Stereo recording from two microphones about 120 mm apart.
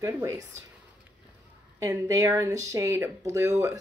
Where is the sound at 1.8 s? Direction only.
30° right (ahead or behind).